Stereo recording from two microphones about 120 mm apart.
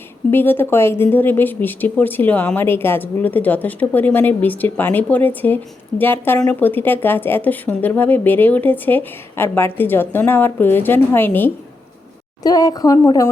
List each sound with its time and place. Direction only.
0.3 s speech: 15° left (ahead or behind)
12.4 s speech: 30° left (ahead or behind)